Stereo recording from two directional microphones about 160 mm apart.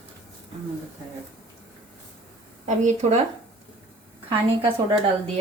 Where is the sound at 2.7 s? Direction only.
45° right (ahead or behind).